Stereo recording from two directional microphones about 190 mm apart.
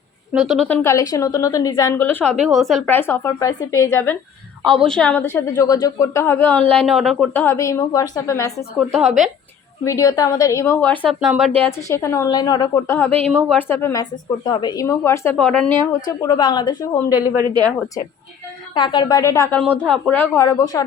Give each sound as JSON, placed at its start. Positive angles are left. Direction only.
{"t": 0.3, "sound": "a woman's voice", "side_deg": 0}
{"t": 0.8, "sound": "speech", "side_deg": 15}
{"t": 2.4, "sound": "speech", "side_deg": 0}
{"t": 4.6, "sound": "a woman's voice", "side_deg": 0}
{"t": 5.3, "sound": "speech", "side_deg": 15}
{"t": 7.3, "sound": "speech", "side_deg": 15}
{"t": 8.9, "sound": "a woman's voice", "side_deg": 0}
{"t": 9.8, "sound": "a woman's voice", "side_deg": 15}
{"t": 11.9, "sound": "speech", "side_deg": 15}
{"t": 13.1, "sound": "speech", "side_deg": -30}
{"t": 13.5, "sound": "speech", "side_deg": 10}
{"t": 16.2, "sound": "a woman's voice", "side_deg": 20}
{"t": 17.1, "sound": "speech", "side_deg": -10}
{"t": 18.7, "sound": "speech", "side_deg": 25}